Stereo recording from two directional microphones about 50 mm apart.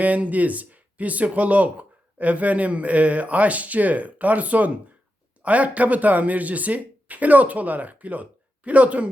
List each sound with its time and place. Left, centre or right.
0.0 s speech: right